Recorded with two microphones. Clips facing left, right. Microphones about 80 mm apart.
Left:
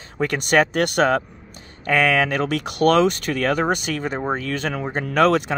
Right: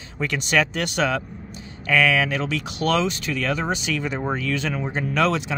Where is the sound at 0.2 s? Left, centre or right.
Left.